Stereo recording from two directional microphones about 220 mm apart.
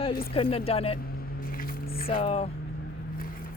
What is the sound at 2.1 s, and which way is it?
Speech, 25° left (ahead or behind).